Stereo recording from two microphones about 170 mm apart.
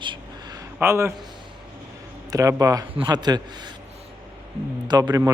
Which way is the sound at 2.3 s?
20° right (ahead or behind).